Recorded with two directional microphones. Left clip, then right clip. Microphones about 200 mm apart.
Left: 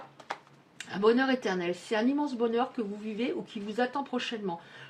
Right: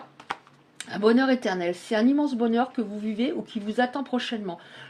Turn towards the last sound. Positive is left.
turn(degrees=-35)  # may be behind; listen again after turning